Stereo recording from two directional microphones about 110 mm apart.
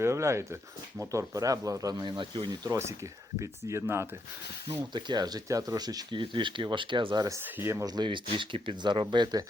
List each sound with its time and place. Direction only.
0.0 s speech: 25° right (ahead or behind); by 2.5 s 45° right (ahead or behind)
2.6 s speech: 25° right (ahead or behind)
4.9 s speech: 40° right (ahead or behind)
7.3 s speech: 25° right (ahead or behind)
7.9 s speech: 45° right (ahead or behind)